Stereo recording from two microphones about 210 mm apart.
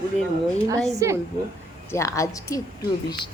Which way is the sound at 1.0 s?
15° right (ahead or behind).